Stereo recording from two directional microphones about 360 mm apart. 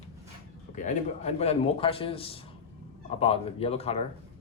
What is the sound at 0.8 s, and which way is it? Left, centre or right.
A man's voice, centre.